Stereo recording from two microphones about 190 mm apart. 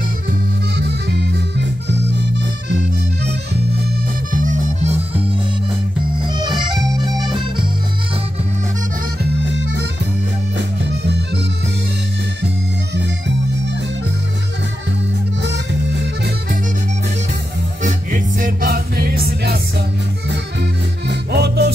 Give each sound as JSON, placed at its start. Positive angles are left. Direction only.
{"t": 0.3, "sound": "accordion", "side_deg": -60}
{"t": 4.3, "sound": "music", "side_deg": -45}
{"t": 6.2, "sound": "accordion", "side_deg": -25}
{"t": 9.5, "sound": "accordion", "side_deg": -70}
{"t": 10.9, "sound": "music", "side_deg": -65}
{"t": 15.4, "sound": "music", "side_deg": -65}
{"t": 17.8, "sound": "music", "side_deg": -45}
{"t": 21.1, "sound": "music", "side_deg": -60}